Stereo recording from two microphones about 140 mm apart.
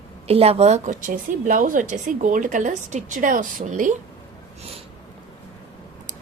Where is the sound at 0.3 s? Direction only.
45° right (ahead or behind); by 3.9 s 70° right (ahead or behind).